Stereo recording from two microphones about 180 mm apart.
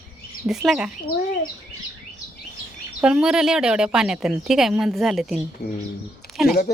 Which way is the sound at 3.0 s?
5° right (ahead or behind).